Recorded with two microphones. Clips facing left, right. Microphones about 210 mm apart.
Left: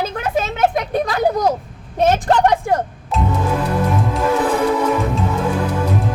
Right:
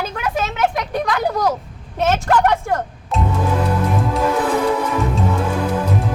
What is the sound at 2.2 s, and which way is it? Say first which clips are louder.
Speech: left 2 dB; 25° left (ahead or behind).